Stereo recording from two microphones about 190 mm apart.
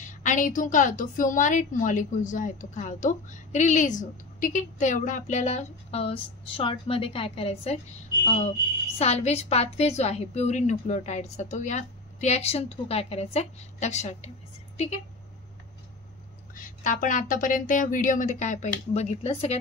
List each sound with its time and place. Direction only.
0.1 s a woman's voice: 40° left (ahead or behind)
16.5 s speech: 45° left (ahead or behind)